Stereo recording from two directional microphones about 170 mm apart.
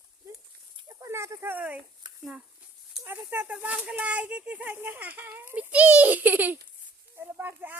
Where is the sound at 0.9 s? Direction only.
20° right (ahead or behind).